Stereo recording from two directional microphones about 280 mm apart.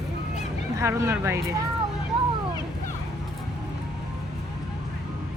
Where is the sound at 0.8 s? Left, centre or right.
Centre.